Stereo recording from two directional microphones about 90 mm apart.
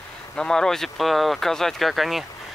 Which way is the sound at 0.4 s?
5° left (ahead or behind).